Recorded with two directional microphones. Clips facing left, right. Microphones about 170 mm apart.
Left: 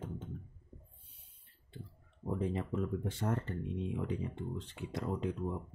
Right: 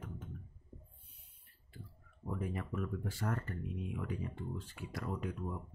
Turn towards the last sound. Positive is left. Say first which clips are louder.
# left 4 dB
turn(degrees=20)  # may be behind; listen again after turning